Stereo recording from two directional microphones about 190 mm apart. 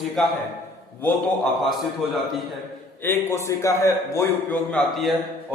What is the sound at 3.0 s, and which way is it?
A man's voice, 15° left (ahead or behind).